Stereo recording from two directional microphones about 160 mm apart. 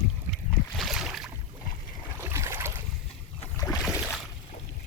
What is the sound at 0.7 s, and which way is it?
Boat, centre (ahead or behind).